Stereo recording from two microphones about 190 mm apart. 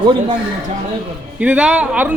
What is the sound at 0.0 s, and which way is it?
Speech, 25° right (ahead or behind).